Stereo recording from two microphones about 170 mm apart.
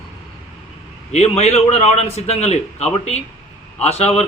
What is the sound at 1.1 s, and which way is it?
A man's voice, 40° left (ahead or behind).